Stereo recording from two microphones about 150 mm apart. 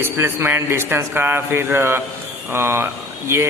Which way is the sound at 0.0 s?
15° right (ahead or behind).